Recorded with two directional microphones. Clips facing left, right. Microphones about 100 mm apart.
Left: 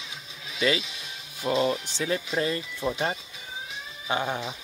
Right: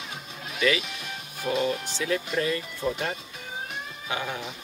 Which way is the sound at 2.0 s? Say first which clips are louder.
Even; 25° left (ahead or behind).